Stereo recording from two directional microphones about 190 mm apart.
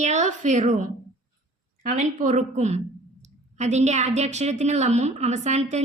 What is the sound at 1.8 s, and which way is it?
A woman's voice, 40° right (ahead or behind).